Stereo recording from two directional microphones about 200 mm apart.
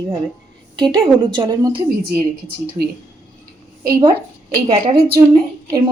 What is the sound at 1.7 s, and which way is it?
Speech, 50° right (ahead or behind).